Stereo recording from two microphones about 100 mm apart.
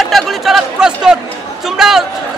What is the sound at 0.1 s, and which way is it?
Speech, centre (ahead or behind).